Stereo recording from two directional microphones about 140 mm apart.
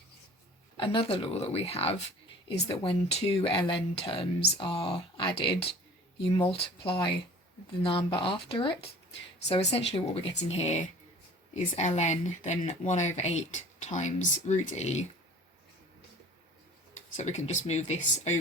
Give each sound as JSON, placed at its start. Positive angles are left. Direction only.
{"t": 0.8, "sound": "speech", "side_deg": 40}
{"t": 9.7, "sound": "speech", "side_deg": 45}
{"t": 17.2, "sound": "speech", "side_deg": 55}